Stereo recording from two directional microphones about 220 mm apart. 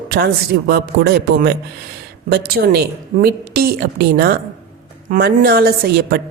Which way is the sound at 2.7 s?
45° right (ahead or behind).